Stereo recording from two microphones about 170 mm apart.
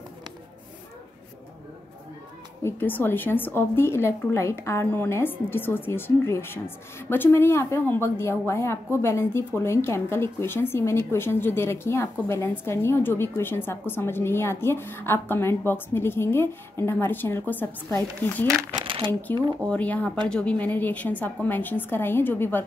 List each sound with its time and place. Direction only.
2.6 s a woman's voice: 10° left (ahead or behind)
18.7 s a sound: 30° right (ahead or behind)
19.6 s a woman's voice: 10° left (ahead or behind)